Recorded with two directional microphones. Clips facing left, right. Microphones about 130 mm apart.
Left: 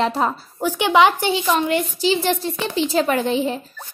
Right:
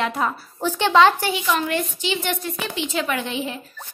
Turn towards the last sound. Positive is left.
turn(degrees=35)  # may be behind; listen again after turning